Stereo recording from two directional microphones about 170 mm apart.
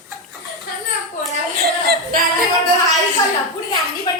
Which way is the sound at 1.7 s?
65° right (ahead or behind).